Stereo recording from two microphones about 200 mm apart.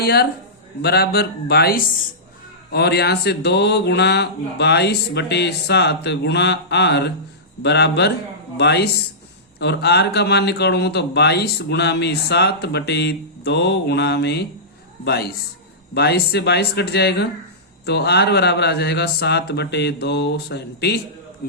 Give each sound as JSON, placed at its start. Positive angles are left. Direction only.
{"t": 0.0, "sound": "speech", "side_deg": 55}